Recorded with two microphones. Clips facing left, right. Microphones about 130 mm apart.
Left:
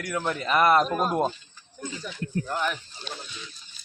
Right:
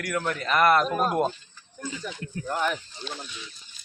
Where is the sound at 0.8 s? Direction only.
Centre (ahead or behind).